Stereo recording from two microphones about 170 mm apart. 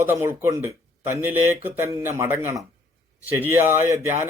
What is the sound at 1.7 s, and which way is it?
Speech, 15° right (ahead or behind).